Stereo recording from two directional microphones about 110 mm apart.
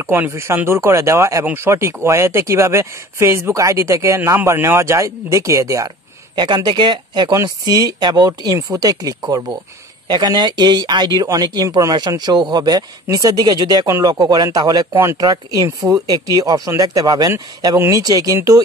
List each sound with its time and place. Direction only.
0.0 s speech: 20° right (ahead or behind)
6.3 s speech: 40° right (ahead or behind)